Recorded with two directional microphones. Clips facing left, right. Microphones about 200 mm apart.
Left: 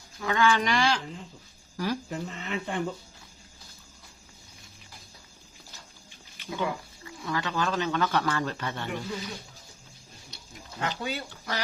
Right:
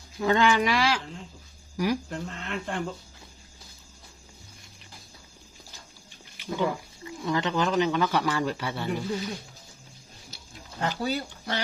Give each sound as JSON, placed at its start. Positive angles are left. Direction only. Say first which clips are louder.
{"t": 0.2, "sound": "speech", "louder": "right 3 dB", "side_deg": -25}
{"t": 0.5, "sound": "speech", "louder": "right 1 dB", "side_deg": -5}
{"t": 1.7, "sound": "speech", "louder": "right 4 dB", "side_deg": -10}
{"t": 2.0, "sound": "speech", "louder": "even", "side_deg": 5}
{"t": 6.3, "sound": "speech", "louder": "right 3 dB", "side_deg": -15}
{"t": 10.3, "sound": "a sound", "louder": "right 1 dB", "side_deg": 0}
{"t": 10.8, "sound": "speech", "louder": "right 4 dB", "side_deg": -35}